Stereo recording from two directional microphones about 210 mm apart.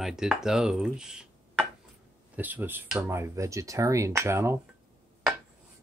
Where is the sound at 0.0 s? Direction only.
Centre (ahead or behind).